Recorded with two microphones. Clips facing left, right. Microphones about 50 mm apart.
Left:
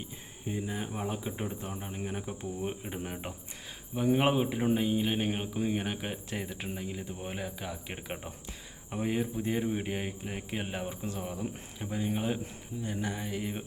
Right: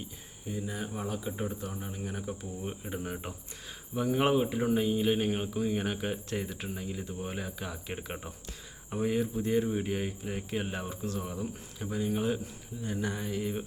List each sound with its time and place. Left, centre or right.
0.6 s speech: left
1.7 s speech: left; by 13.7 s centre